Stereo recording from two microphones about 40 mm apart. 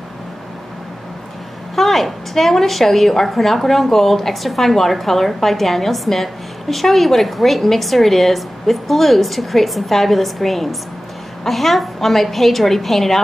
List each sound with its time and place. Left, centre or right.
1.8 s a woman's voice: centre